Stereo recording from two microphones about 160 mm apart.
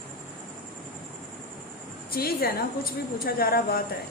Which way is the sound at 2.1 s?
70° left (ahead or behind).